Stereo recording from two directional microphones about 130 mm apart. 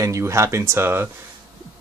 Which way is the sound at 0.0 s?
20° right (ahead or behind).